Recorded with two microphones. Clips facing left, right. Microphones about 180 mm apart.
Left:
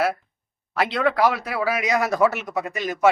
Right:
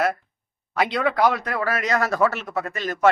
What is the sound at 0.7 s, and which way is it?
Speech, centre (ahead or behind).